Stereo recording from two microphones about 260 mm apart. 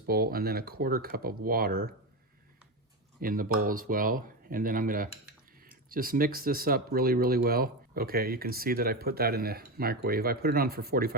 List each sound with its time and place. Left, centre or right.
0.1 s speech: right
3.2 s speech: right